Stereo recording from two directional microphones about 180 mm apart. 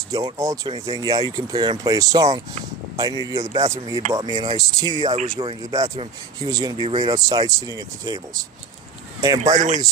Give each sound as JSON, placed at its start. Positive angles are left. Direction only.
{"t": 0.1, "sound": "speech", "side_deg": -20}
{"t": 9.4, "sound": "speech", "side_deg": -40}